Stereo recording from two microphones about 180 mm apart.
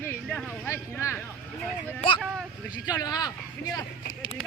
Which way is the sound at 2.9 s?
20° left (ahead or behind).